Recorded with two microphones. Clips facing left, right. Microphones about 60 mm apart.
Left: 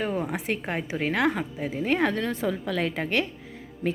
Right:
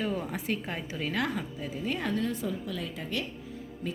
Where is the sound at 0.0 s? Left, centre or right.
Left.